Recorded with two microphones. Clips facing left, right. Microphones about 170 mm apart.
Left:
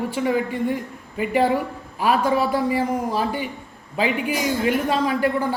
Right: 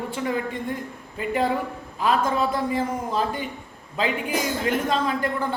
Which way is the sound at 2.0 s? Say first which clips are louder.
Left 3 dB; 10° left (ahead or behind).